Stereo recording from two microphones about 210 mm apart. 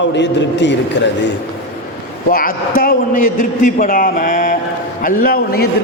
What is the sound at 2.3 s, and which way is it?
A man's voice, 45° left (ahead or behind).